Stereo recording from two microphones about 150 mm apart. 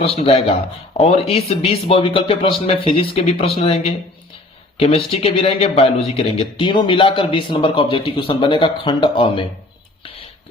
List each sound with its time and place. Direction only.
0.0 s speech: 40° left (ahead or behind)